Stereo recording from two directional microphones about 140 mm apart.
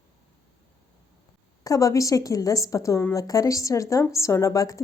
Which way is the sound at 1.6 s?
25° left (ahead or behind).